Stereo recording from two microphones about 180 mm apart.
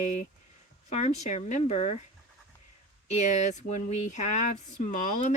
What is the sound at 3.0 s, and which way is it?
Speech, 40° left (ahead or behind).